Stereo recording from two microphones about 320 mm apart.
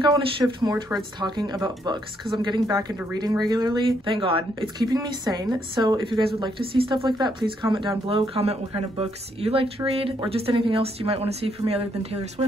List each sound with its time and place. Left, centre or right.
0.6 s speech: centre